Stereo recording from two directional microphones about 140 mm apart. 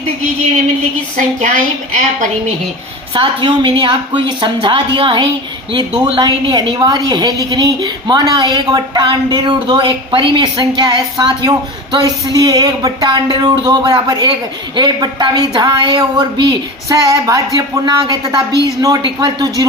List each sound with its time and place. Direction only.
3.2 s a woman's voice: 40° right (ahead or behind)